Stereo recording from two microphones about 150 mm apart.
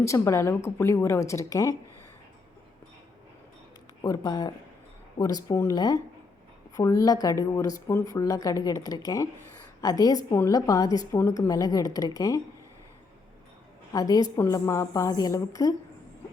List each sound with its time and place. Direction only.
0.0 s a woman's voice: 20° left (ahead or behind)
4.0 s a woman's voice: 25° left (ahead or behind)
13.9 s a woman's voice: 25° left (ahead or behind)